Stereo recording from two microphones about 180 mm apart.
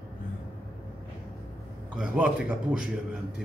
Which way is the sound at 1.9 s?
5° right (ahead or behind).